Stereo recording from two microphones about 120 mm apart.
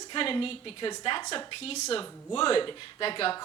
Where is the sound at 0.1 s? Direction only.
45° left (ahead or behind).